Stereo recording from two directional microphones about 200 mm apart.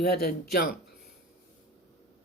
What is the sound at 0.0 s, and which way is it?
Speech, 50° left (ahead or behind).